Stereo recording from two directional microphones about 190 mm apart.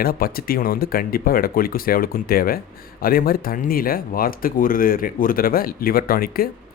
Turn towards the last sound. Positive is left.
turn(degrees=50)  # may be behind; listen again after turning